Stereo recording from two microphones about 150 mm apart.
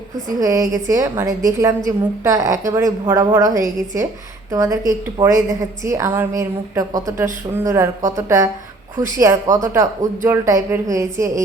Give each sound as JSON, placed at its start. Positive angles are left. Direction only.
{"t": 0.3, "sound": "a woman's voice", "side_deg": -20}